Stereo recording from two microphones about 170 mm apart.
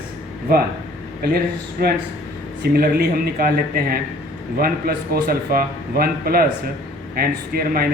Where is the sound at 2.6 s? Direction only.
65° right (ahead or behind).